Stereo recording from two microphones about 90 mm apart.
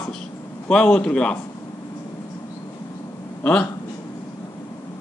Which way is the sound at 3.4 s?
10° left (ahead or behind).